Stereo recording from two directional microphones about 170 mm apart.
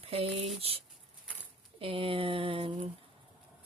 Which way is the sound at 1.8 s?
35° right (ahead or behind).